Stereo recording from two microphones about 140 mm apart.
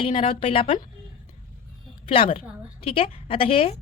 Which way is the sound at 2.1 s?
40° left (ahead or behind).